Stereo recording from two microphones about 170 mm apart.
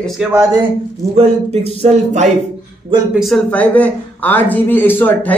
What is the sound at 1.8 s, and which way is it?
Speech, 40° right (ahead or behind).